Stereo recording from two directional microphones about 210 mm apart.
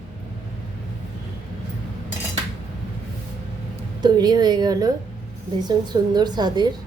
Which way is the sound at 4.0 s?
20° right (ahead or behind).